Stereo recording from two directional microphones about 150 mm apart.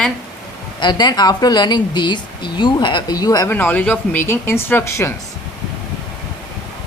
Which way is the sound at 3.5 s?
10° left (ahead or behind).